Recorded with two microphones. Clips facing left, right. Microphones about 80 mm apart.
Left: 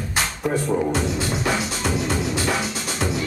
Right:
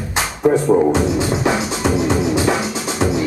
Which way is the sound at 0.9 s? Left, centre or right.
Centre.